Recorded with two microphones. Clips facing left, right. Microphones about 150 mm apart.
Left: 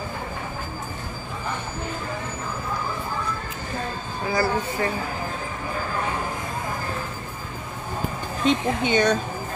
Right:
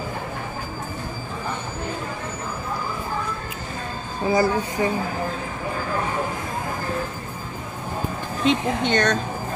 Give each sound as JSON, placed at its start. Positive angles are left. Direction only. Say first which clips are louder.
{"t": 4.3, "sound": "a woman's voice", "louder": "right 3 dB", "side_deg": -20}
{"t": 8.5, "sound": "speech", "louder": "right 1 dB", "side_deg": 5}